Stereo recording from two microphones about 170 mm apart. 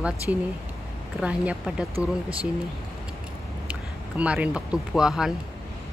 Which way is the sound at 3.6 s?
10° right (ahead or behind).